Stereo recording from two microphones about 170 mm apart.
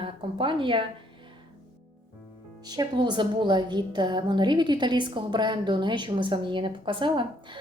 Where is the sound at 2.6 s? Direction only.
25° right (ahead or behind).